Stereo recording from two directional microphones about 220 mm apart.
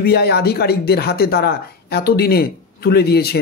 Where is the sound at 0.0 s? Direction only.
45° left (ahead or behind).